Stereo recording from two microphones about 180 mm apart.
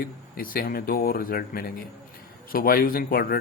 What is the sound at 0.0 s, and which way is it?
Speech, 50° left (ahead or behind).